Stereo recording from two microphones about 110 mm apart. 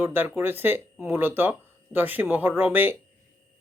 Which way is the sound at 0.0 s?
20° right (ahead or behind).